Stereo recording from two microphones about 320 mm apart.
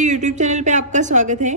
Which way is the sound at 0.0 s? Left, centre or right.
Right.